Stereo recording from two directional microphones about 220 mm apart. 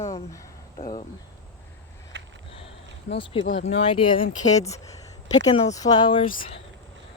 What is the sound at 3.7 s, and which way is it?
Speech, 25° left (ahead or behind).